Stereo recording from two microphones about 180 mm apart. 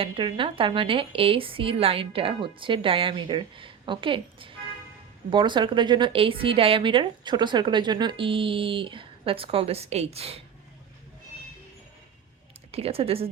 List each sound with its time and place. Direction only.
0.0 s speech: 30° right (ahead or behind)
12.7 s speech: 35° right (ahead or behind)